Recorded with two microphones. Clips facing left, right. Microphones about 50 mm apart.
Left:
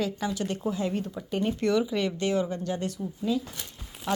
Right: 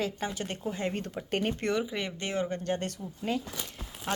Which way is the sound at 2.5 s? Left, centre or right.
Right.